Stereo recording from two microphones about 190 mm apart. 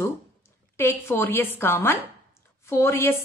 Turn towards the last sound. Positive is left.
turn(degrees=15)  # may be behind; listen again after turning